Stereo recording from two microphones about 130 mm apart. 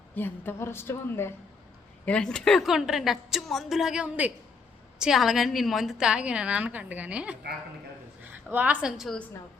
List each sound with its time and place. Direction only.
0.1 s a woman's voice: 15° left (ahead or behind)
2.0 s a woman's voice: 5° left (ahead or behind)